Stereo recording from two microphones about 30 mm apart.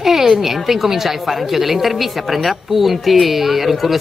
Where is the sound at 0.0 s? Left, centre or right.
Centre.